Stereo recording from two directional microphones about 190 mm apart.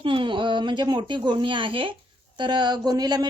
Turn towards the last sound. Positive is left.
turn(degrees=-20)  # may be behind; listen again after turning